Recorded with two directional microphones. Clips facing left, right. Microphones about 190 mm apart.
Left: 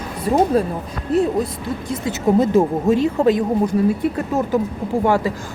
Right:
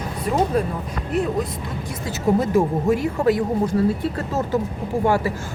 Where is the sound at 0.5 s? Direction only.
30° left (ahead or behind).